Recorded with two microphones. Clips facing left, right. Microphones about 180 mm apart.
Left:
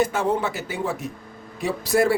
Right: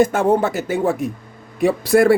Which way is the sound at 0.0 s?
50° right (ahead or behind).